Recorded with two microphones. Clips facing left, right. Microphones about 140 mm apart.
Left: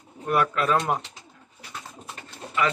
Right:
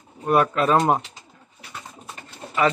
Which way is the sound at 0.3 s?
30° right (ahead or behind).